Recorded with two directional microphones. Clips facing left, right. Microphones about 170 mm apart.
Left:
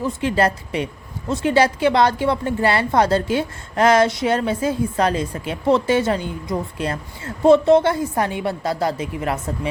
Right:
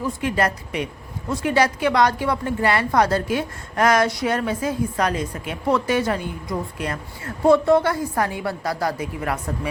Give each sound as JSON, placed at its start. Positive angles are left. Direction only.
{"t": 0.0, "sound": "a woman's voice", "side_deg": 25}